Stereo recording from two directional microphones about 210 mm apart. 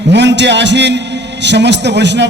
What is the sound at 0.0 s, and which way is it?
A man's voice, 55° right (ahead or behind).